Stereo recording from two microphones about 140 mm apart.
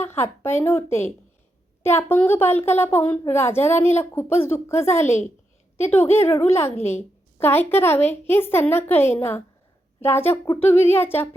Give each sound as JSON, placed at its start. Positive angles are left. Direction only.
{"t": 0.0, "sound": "a woman's voice", "side_deg": 15}